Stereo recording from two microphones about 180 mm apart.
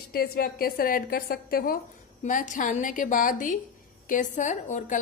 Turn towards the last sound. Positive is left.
turn(degrees=45)  # may be behind; listen again after turning